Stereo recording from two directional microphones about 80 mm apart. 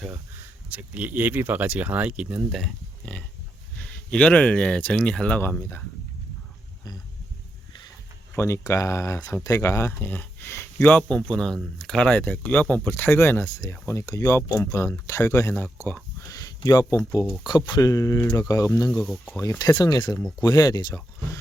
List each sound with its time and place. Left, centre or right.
0.7 s speech: centre
3.8 s speech: centre
5.4 s speech: left
8.4 s speech: left
10.0 s speech: left
10.8 s speech: centre
16.3 s speech: left
19.0 s speech: centre
19.4 s speech: left